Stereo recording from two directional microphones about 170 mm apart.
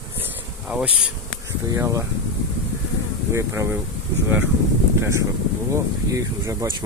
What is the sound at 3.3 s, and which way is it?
Speech, 15° right (ahead or behind).